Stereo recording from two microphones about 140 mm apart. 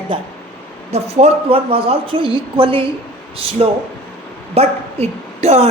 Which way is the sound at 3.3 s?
40° right (ahead or behind).